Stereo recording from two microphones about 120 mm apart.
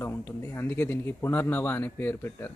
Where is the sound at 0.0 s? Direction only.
20° left (ahead or behind).